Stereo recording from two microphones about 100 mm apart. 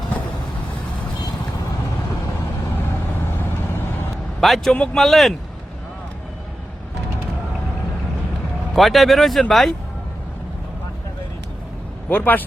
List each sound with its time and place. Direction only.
4.4 s speech: centre (ahead or behind)
8.7 s speech: centre (ahead or behind)
12.0 s a man's voice: 20° left (ahead or behind)